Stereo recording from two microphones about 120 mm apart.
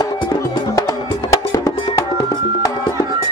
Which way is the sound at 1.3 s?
25° left (ahead or behind).